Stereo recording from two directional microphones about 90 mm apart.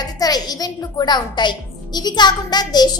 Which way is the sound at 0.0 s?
45° left (ahead or behind).